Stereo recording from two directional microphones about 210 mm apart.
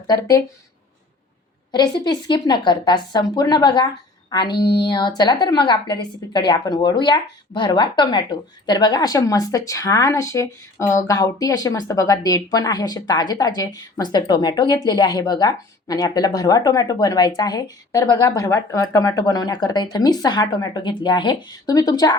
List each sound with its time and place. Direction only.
0.1 s speech: 15° left (ahead or behind)
1.7 s a woman's voice: 20° left (ahead or behind)